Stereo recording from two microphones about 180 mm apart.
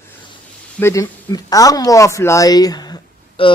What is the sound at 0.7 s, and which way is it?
Speech, 15° left (ahead or behind).